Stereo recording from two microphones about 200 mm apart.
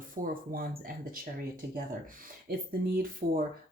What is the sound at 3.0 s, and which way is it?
Speech, 45° right (ahead or behind).